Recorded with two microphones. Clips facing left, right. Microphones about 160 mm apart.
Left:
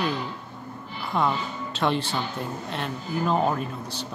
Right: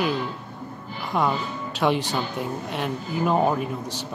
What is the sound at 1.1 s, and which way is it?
Speech, 10° right (ahead or behind).